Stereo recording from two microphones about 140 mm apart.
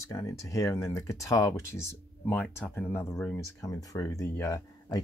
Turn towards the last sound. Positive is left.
turn(degrees=20)  # may be behind; listen again after turning